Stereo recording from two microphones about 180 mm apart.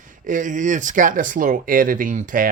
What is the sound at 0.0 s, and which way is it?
Speech, 45° right (ahead or behind).